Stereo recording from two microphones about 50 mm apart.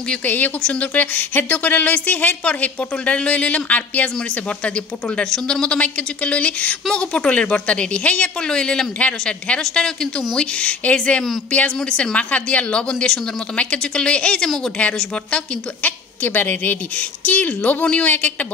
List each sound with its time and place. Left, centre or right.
0.2 s a woman's voice: left
0.6 s a woman's voice: left
0.9 s a woman's voice: left
4.6 s a woman's voice: left